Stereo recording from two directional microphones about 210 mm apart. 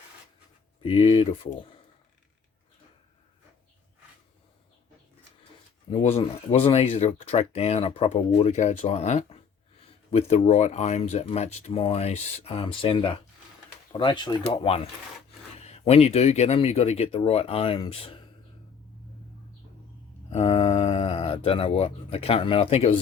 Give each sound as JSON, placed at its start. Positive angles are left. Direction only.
{"t": 0.8, "sound": "speech", "side_deg": 25}
{"t": 6.0, "sound": "speech", "side_deg": 30}
{"t": 20.3, "sound": "speech", "side_deg": 30}